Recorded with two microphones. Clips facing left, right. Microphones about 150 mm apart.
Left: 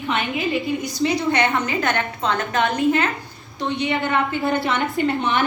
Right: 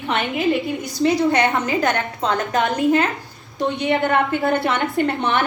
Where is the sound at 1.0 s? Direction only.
40° right (ahead or behind).